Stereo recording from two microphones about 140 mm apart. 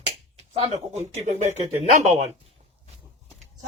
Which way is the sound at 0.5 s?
50° right (ahead or behind).